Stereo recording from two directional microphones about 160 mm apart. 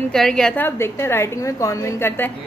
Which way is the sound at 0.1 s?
5° left (ahead or behind).